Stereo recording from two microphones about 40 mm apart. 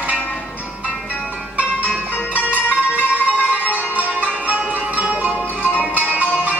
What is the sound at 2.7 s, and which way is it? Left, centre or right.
Music, right.